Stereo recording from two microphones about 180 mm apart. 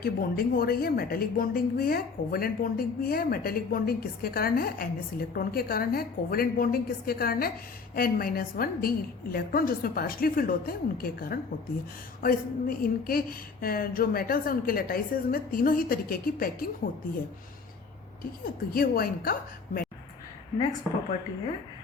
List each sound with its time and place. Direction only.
0.0 s a woman's voice: 55° left (ahead or behind)
18.7 s a woman's voice: 55° left (ahead or behind)